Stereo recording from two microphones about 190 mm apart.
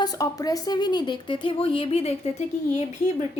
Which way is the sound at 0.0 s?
20° left (ahead or behind).